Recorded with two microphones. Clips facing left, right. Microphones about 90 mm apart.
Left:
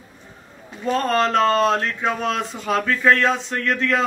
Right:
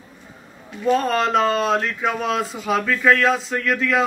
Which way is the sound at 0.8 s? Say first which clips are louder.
Right 1 dB; 5° right (ahead or behind).